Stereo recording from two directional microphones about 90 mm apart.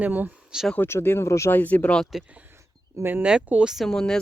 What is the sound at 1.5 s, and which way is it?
Speech, 20° left (ahead or behind).